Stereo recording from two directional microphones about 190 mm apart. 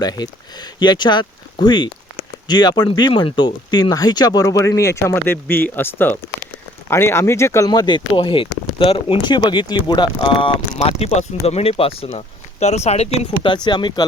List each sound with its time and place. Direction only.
0.0 s speech: 20° left (ahead or behind)